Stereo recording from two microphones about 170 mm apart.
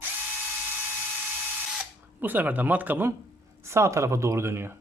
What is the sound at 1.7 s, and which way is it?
A man's voice, 10° right (ahead or behind).